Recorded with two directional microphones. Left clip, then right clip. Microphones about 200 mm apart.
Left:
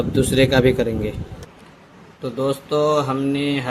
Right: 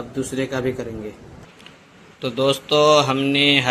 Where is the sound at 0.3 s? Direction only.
40° left (ahead or behind).